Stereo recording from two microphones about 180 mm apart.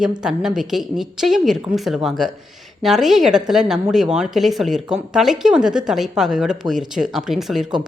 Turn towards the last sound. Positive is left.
turn(degrees=0)  # may be behind; listen again after turning